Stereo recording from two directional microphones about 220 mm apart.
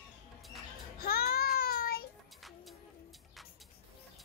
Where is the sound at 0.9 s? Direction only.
45° left (ahead or behind).